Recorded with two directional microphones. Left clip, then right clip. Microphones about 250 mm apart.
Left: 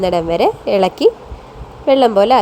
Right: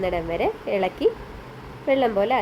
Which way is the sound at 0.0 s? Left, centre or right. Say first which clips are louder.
Left 10 dB; left.